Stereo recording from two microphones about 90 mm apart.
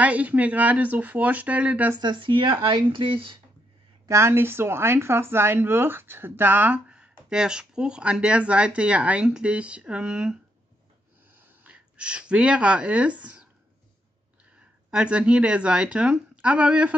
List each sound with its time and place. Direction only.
0.0 s speech: 15° right (ahead or behind)
2.0 s speech: 60° right (ahead or behind); by 3.3 s 75° right (ahead or behind)
4.1 s speech: 30° right (ahead or behind); by 10.3 s 10° right (ahead or behind)
11.6 s speech: 15° right (ahead or behind)
14.9 s speech: 10° right (ahead or behind)